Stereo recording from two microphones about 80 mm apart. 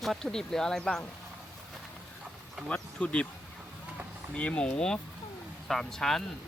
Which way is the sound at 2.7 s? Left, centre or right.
Centre.